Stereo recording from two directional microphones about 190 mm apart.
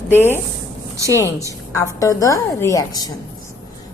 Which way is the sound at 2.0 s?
15° left (ahead or behind).